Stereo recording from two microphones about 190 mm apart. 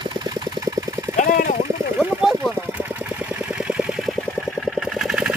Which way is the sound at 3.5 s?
5° right (ahead or behind).